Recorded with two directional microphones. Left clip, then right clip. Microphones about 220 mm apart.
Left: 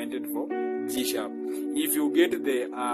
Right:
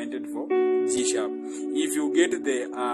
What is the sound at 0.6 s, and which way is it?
Speech, centre (ahead or behind).